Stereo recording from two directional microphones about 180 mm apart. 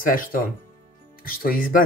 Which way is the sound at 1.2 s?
55° left (ahead or behind).